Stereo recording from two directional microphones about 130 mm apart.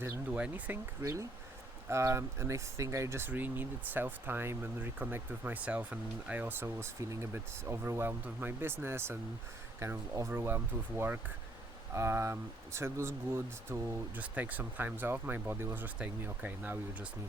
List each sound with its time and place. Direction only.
0.0 s speech: 10° right (ahead or behind)
1.0 s speech: 20° right (ahead or behind)